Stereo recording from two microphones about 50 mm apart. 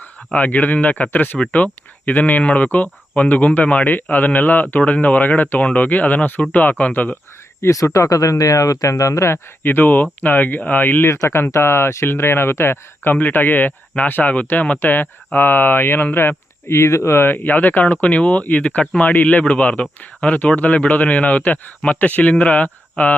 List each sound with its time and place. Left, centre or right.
0.3 s speech: left
7.6 s speech: left
9.6 s speech: left
11.1 s speech: left
13.1 s speech: left
14.8 s speech: left
16.1 s speech: left